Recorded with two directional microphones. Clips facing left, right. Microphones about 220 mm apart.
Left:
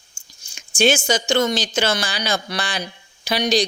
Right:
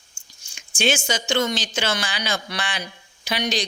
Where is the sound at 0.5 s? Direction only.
40° left (ahead or behind).